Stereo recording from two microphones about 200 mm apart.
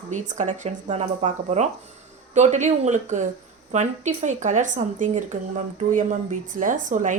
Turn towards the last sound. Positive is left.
turn(degrees=-40)  # may be behind; listen again after turning